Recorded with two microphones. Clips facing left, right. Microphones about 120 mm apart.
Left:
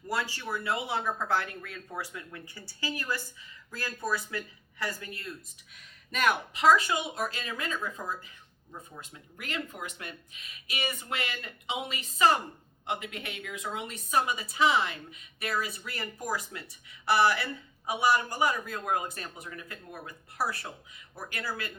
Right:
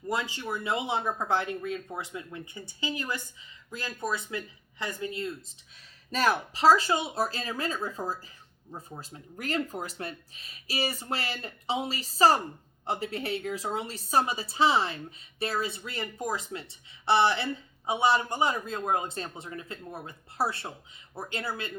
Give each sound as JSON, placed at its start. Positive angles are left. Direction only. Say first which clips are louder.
{"t": 0.1, "sound": "speech", "louder": "right 1 dB", "side_deg": -20}